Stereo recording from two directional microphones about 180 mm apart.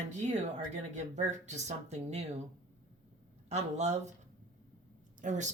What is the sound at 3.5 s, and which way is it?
Speech, 40° right (ahead or behind).